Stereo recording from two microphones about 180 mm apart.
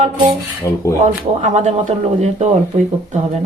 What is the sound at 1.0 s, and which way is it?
Speech, 40° right (ahead or behind).